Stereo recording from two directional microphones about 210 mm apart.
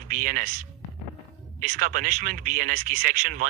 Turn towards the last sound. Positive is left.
turn(degrees=-40)  # may be behind; listen again after turning